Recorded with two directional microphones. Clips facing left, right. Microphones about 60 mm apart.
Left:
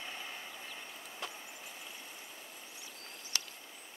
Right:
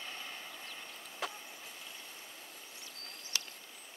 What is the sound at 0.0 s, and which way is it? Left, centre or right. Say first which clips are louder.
Vehicle: left 1 dB; centre.